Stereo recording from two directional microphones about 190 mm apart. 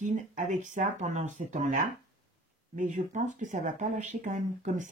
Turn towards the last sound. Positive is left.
turn(degrees=-40)  # may be behind; listen again after turning